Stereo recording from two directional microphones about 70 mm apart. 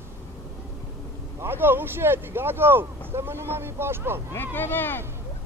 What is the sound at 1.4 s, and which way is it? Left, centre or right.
Speech, right.